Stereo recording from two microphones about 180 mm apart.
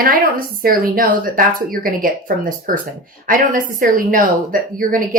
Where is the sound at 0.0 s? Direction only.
55° right (ahead or behind).